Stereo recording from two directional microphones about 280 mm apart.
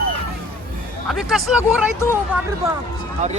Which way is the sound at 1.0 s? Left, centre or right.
Centre.